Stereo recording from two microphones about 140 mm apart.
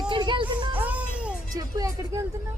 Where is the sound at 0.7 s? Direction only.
10° right (ahead or behind).